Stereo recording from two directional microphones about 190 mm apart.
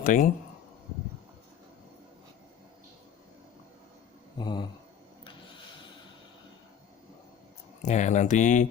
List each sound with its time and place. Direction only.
0.0 s speech: 45° left (ahead or behind)
4.4 s speech: 25° left (ahead or behind)
5.2 s a sound: 25° left (ahead or behind)
7.8 s speech: 40° left (ahead or behind)